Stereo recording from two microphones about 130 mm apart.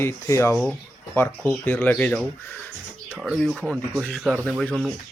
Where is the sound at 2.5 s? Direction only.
15° left (ahead or behind).